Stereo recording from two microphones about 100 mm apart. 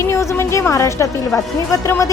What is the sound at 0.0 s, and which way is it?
A woman's voice, 30° left (ahead or behind).